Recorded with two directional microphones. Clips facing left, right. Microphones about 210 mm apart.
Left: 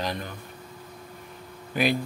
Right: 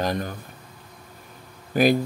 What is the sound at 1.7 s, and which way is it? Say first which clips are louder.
Speech: right 6 dB; 40° right (ahead or behind).